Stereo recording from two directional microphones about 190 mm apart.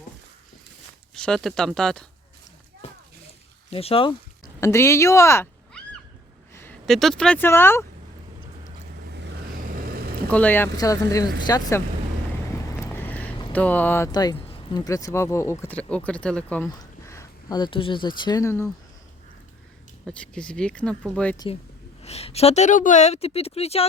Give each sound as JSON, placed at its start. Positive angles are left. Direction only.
{"t": 1.1, "sound": "speech", "side_deg": 5}
{"t": 3.7, "sound": "a woman's voice", "side_deg": 30}
{"t": 4.6, "sound": "speech", "side_deg": 15}
{"t": 6.5, "sound": "a sound", "side_deg": 10}
{"t": 6.8, "sound": "speech", "side_deg": 0}
{"t": 9.0, "sound": "vehicle", "side_deg": -65}
{"t": 10.2, "sound": "speech", "side_deg": 10}
{"t": 13.0, "sound": "a sound", "side_deg": 10}
{"t": 13.5, "sound": "speech", "side_deg": 10}
{"t": 16.6, "sound": "speech", "side_deg": 15}
{"t": 20.1, "sound": "speech", "side_deg": 5}
{"t": 21.3, "sound": "a woman's voice", "side_deg": 25}